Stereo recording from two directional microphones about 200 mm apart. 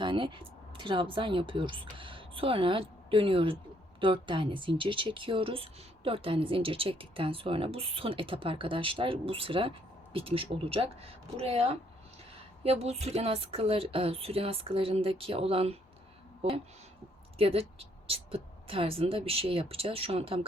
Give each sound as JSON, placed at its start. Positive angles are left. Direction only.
{"t": 0.0, "sound": "speech", "side_deg": -25}
{"t": 17.3, "sound": "speech", "side_deg": -30}